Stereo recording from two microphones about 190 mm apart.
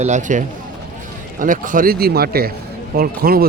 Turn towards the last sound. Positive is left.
turn(degrees=-50)  # may be behind; listen again after turning